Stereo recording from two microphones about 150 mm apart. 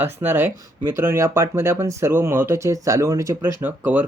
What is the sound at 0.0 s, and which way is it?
Speech, 15° right (ahead or behind).